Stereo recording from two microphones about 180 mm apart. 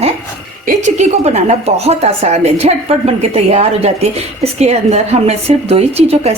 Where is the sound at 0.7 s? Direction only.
40° right (ahead or behind).